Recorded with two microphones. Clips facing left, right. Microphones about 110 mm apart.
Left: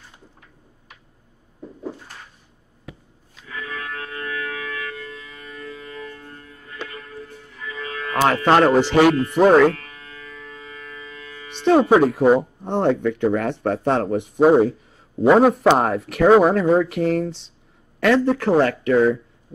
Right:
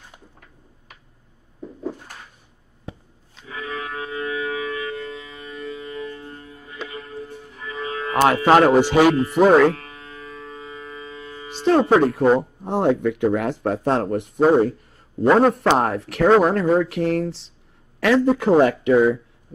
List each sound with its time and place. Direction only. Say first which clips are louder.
2.9 s a sound: right 3 dB; 30° right (ahead or behind)
3.4 s music: right 2 dB; 20° right (ahead or behind)
8.2 s speech: right 1 dB; 5° right (ahead or behind)
9.8 s music: right 2 dB; 25° right (ahead or behind)
11.6 s speech: left 1 dB; centre (ahead or behind)